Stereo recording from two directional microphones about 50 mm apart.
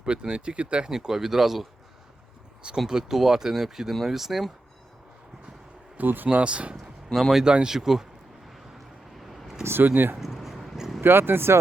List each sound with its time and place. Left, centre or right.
0.0 s speech: centre
2.7 s speech: centre
6.0 s speech: right
6.2 s speech: right
7.1 s speech: centre
7.4 s speech: centre
9.1 s a sound: centre
9.6 s speech: right
10.2 s a sound: centre
11.0 s speech: right